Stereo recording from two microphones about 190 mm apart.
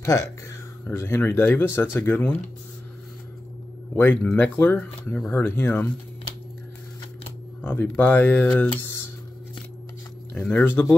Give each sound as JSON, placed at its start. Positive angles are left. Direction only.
{"t": 0.0, "sound": "speech", "side_deg": 15}
{"t": 3.9, "sound": "speech", "side_deg": 10}
{"t": 7.6, "sound": "speech", "side_deg": 10}
{"t": 10.3, "sound": "speech", "side_deg": 5}